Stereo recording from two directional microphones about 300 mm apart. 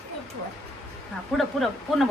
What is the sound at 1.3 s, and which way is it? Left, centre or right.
Speech, centre.